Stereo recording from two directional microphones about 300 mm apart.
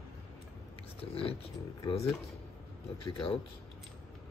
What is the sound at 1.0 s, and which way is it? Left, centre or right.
Speech, centre.